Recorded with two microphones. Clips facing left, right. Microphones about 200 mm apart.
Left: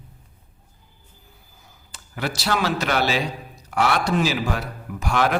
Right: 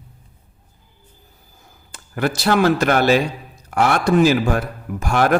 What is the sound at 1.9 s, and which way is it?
A man's voice, 50° right (ahead or behind).